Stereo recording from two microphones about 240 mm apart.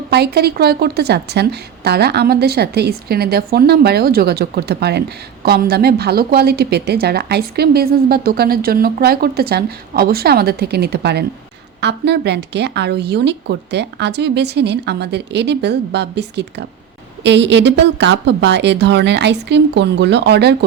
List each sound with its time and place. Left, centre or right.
0.1 s a woman's voice: right